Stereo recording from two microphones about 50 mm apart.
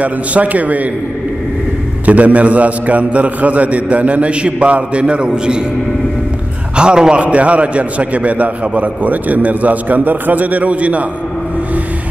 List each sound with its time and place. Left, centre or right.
0.0 s a man's voice: right
2.0 s a man's voice: right
6.8 s a man's voice: centre